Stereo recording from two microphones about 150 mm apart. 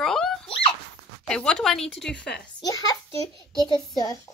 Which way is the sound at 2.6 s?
25° left (ahead or behind).